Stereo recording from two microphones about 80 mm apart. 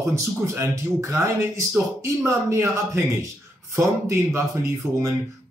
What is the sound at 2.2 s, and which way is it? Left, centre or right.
Speech, right.